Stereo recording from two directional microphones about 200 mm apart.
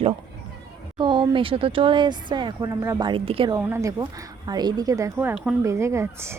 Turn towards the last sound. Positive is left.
turn(degrees=-15)  # may be behind; listen again after turning